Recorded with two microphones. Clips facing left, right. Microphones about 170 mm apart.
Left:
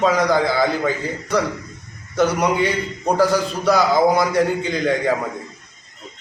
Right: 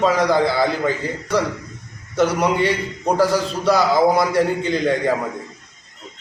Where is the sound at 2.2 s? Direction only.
5° right (ahead or behind).